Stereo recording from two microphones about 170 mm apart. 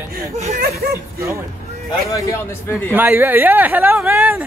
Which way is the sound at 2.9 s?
10° right (ahead or behind).